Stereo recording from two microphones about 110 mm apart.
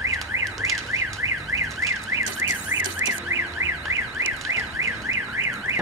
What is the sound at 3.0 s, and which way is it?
Car alarm, 30° right (ahead or behind).